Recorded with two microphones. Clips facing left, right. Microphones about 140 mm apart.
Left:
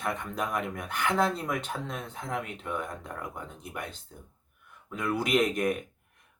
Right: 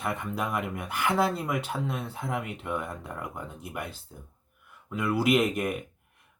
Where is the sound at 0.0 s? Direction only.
5° right (ahead or behind).